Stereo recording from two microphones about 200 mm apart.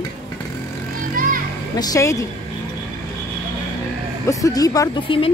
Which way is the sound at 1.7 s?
15° left (ahead or behind).